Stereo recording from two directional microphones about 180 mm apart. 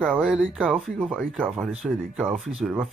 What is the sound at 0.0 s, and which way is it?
Speech, centre (ahead or behind).